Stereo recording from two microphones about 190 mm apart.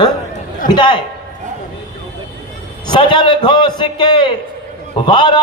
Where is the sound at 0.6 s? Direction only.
25° left (ahead or behind).